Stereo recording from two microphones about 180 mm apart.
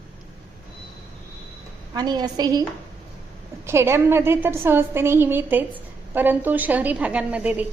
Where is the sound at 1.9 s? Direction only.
25° right (ahead or behind).